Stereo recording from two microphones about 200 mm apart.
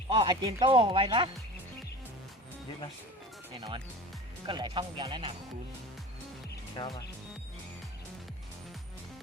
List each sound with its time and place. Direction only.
0.1 s speech: 25° right (ahead or behind)
4.4 s speech: 20° right (ahead or behind)
6.7 s speech: 20° left (ahead or behind)